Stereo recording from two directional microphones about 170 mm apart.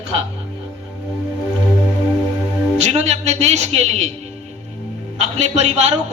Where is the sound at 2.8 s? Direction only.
40° right (ahead or behind).